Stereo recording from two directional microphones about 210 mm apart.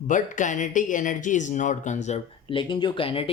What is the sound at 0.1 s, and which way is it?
Speech, 35° left (ahead or behind).